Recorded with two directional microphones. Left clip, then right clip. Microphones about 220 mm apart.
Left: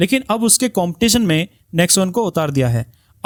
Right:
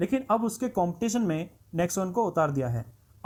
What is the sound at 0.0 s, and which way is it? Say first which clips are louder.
Speech: left 9 dB; 70° left (ahead or behind).